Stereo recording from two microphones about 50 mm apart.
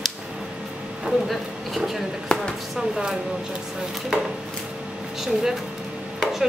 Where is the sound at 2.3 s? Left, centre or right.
Centre.